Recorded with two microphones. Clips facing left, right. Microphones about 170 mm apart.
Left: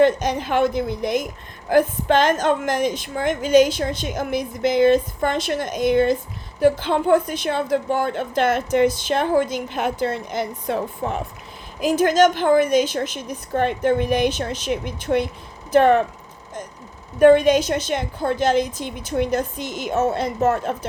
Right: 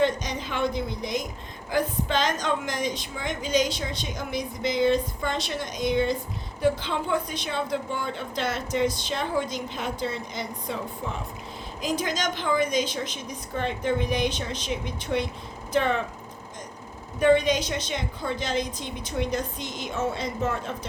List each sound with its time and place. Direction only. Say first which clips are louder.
0.0 s a woman's voice: left 8 dB; 55° left (ahead or behind)
17.2 s a woman's voice: left 8 dB; 55° left (ahead or behind)
18.6 s a woman's voice: left 5 dB; 5° left (ahead or behind)
19.1 s a woman's voice: left 7 dB; 55° left (ahead or behind)
19.6 s a woman's voice: left 6 dB; 5° left (ahead or behind)
19.9 s a woman's voice: left 8 dB; 50° left (ahead or behind)